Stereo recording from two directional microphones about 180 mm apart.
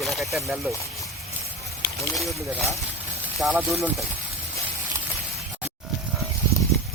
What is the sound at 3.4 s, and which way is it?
Speech, 5° right (ahead or behind).